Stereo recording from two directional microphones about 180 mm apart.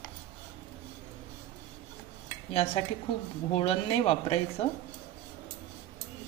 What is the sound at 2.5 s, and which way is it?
Speech, 35° left (ahead or behind).